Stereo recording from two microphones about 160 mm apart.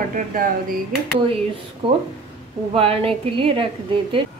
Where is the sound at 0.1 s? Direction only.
60° right (ahead or behind).